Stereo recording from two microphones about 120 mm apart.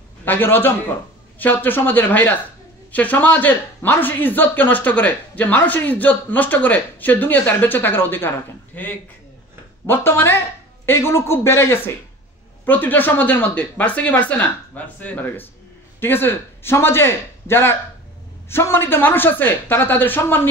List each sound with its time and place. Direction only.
0.2 s a man's voice: 15° left (ahead or behind)